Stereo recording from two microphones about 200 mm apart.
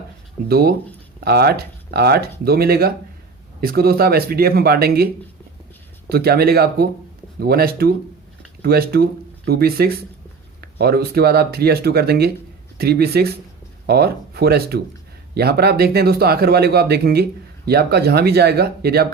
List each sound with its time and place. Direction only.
0.4 s speech: 50° right (ahead or behind)
6.1 s speech: 50° right (ahead or behind)